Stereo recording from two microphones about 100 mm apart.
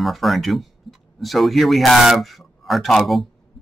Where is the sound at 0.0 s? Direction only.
Centre (ahead or behind).